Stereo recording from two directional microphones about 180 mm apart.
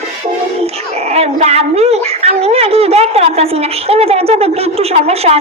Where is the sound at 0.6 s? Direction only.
35° right (ahead or behind).